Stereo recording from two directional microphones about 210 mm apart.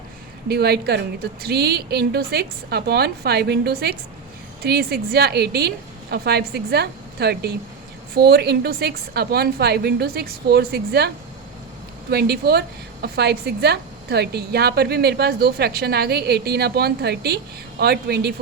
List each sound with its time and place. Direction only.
0.4 s a woman's voice: 50° right (ahead or behind)
12.1 s a woman's voice: 50° right (ahead or behind)